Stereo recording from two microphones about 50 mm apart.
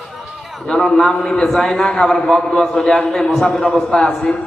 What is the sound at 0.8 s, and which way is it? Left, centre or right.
A man's voice, centre.